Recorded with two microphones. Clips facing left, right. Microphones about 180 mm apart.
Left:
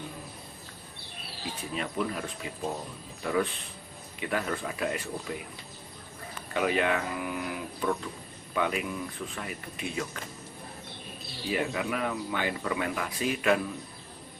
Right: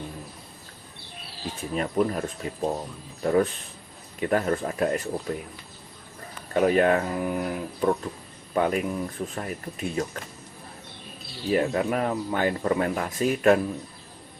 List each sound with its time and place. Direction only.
1.7 s speech: 45° right (ahead or behind)
6.5 s speech: 40° right (ahead or behind)
11.5 s speech: 45° right (ahead or behind)